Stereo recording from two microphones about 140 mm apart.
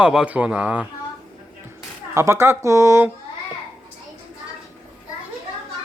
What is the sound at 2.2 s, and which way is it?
Speech, 20° right (ahead or behind).